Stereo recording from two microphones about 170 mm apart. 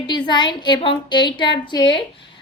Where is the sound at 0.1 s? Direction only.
25° left (ahead or behind).